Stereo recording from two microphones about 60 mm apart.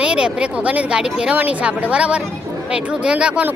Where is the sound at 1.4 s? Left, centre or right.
Right.